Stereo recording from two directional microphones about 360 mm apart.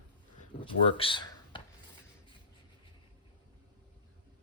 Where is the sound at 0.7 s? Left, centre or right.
Centre.